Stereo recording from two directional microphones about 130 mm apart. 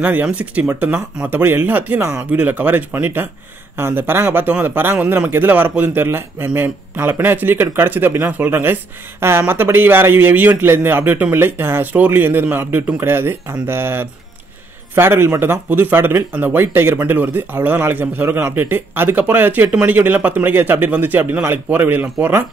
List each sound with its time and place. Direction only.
0.0 s speech: 10° right (ahead or behind)